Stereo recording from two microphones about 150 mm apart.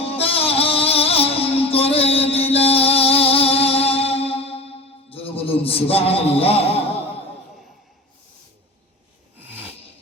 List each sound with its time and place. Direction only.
0.0 s music: 40° left (ahead or behind)